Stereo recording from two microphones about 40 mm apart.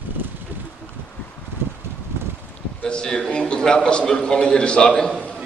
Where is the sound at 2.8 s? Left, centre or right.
Centre.